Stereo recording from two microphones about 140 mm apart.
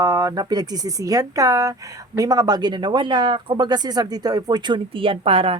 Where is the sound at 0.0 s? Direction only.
30° right (ahead or behind).